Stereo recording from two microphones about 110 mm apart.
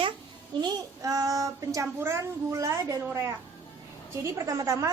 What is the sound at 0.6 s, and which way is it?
A woman's voice, 35° right (ahead or behind).